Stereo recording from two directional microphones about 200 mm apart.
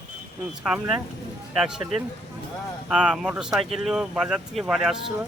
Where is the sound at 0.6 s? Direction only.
5° right (ahead or behind).